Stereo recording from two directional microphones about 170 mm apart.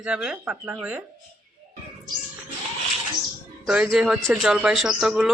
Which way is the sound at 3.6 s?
5° right (ahead or behind).